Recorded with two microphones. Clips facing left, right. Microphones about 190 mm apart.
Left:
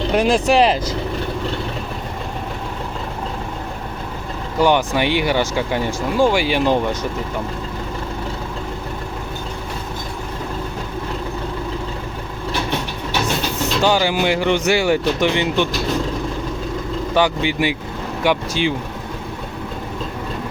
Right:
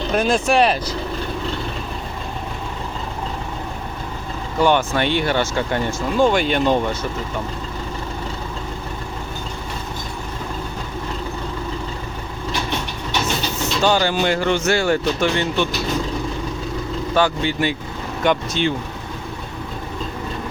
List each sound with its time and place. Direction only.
0.1 s speech: 15° left (ahead or behind)
4.6 s speech: 15° left (ahead or behind)
13.8 s speech: 10° left (ahead or behind)
17.2 s speech: 15° left (ahead or behind)